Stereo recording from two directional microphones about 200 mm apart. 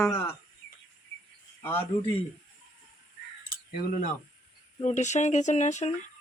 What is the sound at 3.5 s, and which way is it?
Cutlery, 45° left (ahead or behind).